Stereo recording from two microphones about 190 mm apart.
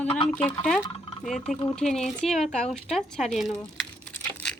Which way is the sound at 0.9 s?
30° left (ahead or behind).